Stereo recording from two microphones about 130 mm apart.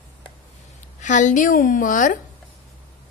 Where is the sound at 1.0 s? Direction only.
70° left (ahead or behind).